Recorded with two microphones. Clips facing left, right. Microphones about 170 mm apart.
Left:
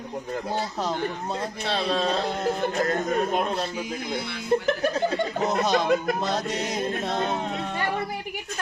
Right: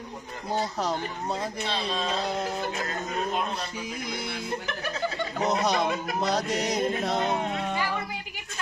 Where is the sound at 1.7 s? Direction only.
60° left (ahead or behind).